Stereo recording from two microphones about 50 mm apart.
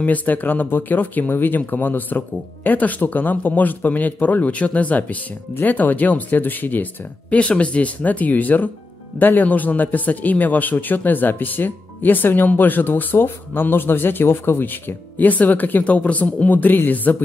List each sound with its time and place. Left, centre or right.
0.0 s speech: left
7.3 s speech: left